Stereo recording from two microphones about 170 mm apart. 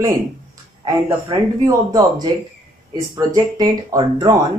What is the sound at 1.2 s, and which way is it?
Speech, 20° right (ahead or behind).